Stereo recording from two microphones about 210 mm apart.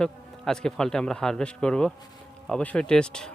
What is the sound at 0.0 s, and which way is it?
Speech, 5° left (ahead or behind).